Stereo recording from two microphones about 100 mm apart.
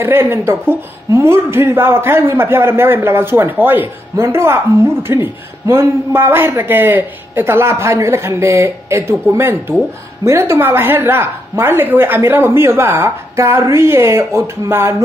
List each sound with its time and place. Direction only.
0.0 s speech: 25° right (ahead or behind)